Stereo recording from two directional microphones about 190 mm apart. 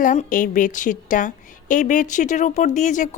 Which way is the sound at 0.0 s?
40° left (ahead or behind).